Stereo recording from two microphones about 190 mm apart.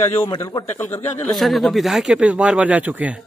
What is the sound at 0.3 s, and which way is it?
Speech, 20° left (ahead or behind).